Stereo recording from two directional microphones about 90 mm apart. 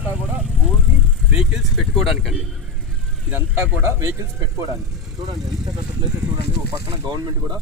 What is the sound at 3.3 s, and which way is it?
Speech, 20° right (ahead or behind).